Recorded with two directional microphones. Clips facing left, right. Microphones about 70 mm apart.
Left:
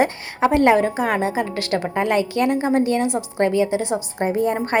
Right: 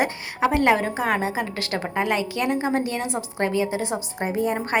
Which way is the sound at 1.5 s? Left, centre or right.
Right.